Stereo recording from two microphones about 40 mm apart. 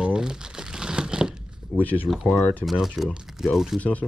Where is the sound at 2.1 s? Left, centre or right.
Centre.